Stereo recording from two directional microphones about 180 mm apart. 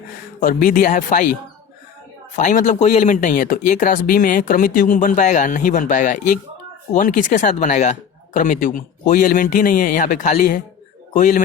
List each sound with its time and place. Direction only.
0.3 s speech: 50° left (ahead or behind)
2.3 s speech: 45° left (ahead or behind)